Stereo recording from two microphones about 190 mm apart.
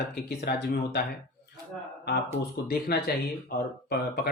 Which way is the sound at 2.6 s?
55° left (ahead or behind).